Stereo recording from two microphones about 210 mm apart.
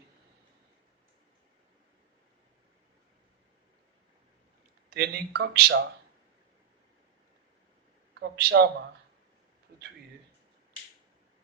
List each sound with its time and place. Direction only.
4.9 s speech: 50° right (ahead or behind)
8.1 s speech: 50° right (ahead or behind)